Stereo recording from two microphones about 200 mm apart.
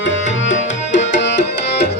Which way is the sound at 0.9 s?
65° left (ahead or behind).